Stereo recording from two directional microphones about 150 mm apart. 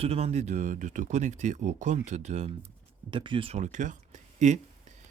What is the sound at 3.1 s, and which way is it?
Speech, 35° right (ahead or behind).